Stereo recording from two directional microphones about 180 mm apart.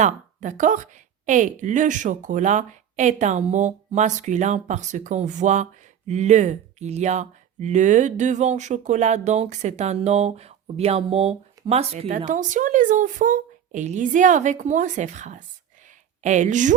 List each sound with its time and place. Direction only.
0.0 s a woman's voice: 45° right (ahead or behind)